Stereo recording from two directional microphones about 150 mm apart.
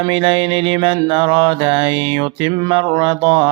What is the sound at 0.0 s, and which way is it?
Mantra, 35° right (ahead or behind).